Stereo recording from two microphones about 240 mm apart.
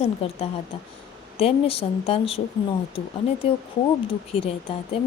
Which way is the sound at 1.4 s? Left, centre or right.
Left.